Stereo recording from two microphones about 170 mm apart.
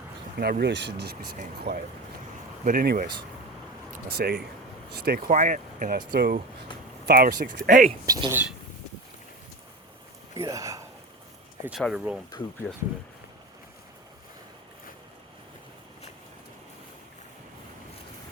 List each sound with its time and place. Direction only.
0.3 s speech: 65° right (ahead or behind)
1.7 s speech: 80° right
2.6 s speech: 60° right (ahead or behind)
4.1 s speech: 70° right (ahead or behind)
5.3 s speech: 50° right (ahead or behind)
6.1 s speech: 70° right (ahead or behind); by 7.9 s 50° right (ahead or behind)
8.0 s speech: 20° right (ahead or behind)
10.3 s speech: 20° right (ahead or behind)
11.8 s speech: 5° right (ahead or behind)